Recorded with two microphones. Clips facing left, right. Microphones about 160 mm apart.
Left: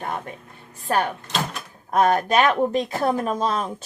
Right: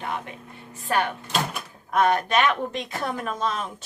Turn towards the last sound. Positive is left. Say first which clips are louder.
# left 5 dB
turn(degrees=35)  # may be behind; listen again after turning